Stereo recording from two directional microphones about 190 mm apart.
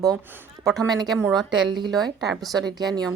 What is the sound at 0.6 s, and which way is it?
A woman's voice, centre (ahead or behind).